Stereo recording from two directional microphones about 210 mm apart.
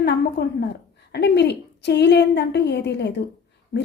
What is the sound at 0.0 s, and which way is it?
A woman's voice, 50° left (ahead or behind).